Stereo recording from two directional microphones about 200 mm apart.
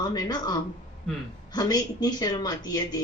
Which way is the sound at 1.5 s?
20° left (ahead or behind).